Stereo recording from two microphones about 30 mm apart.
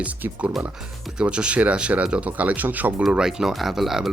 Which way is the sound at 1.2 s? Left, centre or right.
Right.